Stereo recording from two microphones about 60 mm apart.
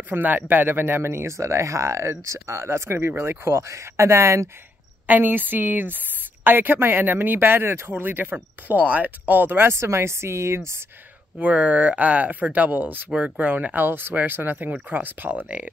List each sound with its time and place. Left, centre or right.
0.1 s speech: right
5.0 s speech: right
9.7 s speech: right
11.3 s speech: right